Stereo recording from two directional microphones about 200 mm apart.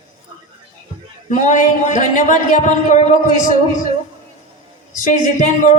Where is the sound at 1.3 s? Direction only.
40° left (ahead or behind).